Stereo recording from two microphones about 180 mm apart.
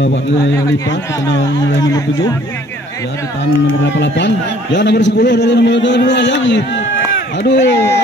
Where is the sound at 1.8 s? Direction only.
20° left (ahead or behind).